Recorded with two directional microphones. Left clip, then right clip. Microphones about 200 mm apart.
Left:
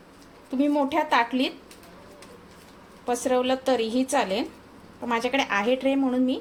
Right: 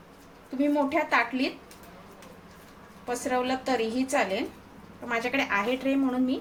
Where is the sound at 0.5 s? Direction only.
35° left (ahead or behind).